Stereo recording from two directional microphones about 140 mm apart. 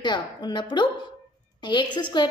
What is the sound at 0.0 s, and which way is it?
A woman's voice, 30° left (ahead or behind).